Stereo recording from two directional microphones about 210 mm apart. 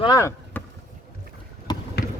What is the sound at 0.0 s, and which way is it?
Vehicle, 15° left (ahead or behind).